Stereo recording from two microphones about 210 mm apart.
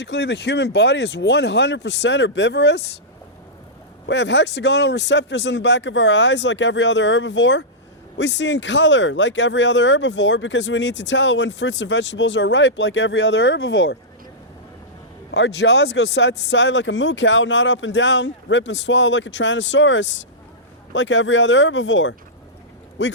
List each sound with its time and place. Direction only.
0.0 s speech: 55° left (ahead or behind)
4.1 s speech: 55° left (ahead or behind)
15.3 s speech: 55° left (ahead or behind)